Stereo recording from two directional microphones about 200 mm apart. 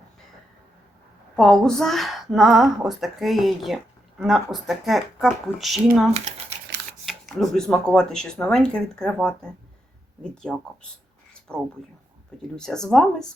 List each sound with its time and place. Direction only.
1.4 s a woman's voice: 5° left (ahead or behind)
6.1 s speech: 30° right (ahead or behind)
7.0 s a sound: centre (ahead or behind)
7.9 s a woman's voice: 5° left (ahead or behind)
11.5 s a woman's voice: 5° left (ahead or behind)